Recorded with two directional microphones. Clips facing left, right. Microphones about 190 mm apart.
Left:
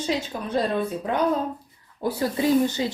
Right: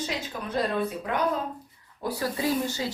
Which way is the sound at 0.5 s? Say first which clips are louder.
Left 3 dB; 30° left (ahead or behind).